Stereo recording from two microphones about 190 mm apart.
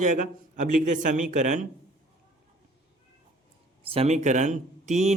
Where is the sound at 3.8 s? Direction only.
30° right (ahead or behind).